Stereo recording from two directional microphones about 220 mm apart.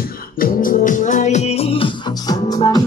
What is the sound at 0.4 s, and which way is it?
Music, 40° left (ahead or behind).